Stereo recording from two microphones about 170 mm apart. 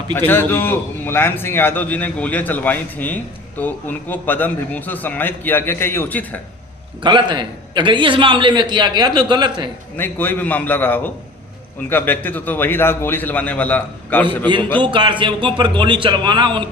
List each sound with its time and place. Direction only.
0.1 s a man's voice: 10° left (ahead or behind)
7.0 s a man's voice: 25° right (ahead or behind)
10.0 s a man's voice: 10° left (ahead or behind)
14.8 s a man's voice: 30° right (ahead or behind)